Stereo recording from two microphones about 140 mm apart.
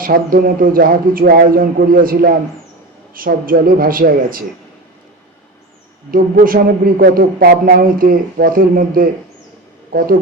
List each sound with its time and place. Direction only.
0.0 s speech: 90° right
6.1 s speech: 85° right